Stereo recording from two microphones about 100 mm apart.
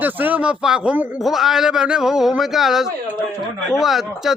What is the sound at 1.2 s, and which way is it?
A man's voice, 5° right (ahead or behind).